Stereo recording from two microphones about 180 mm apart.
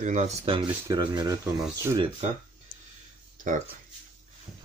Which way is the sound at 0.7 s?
20° right (ahead or behind).